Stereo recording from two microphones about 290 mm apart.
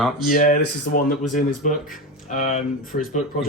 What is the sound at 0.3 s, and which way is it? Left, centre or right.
Speech, left.